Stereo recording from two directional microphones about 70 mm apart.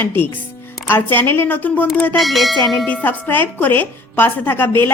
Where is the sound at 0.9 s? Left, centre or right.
Left.